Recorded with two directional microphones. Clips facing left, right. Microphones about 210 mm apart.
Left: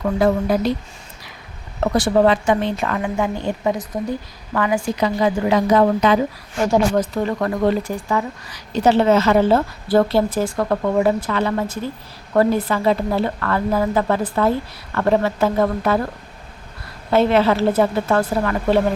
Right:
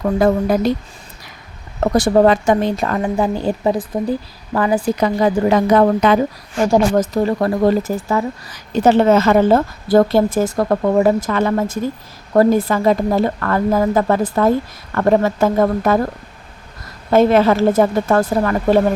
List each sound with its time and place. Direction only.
0.0 s speech: 45° right (ahead or behind)
1.8 s a woman's voice: 40° right (ahead or behind)
6.9 s a woman's voice: 40° right (ahead or behind)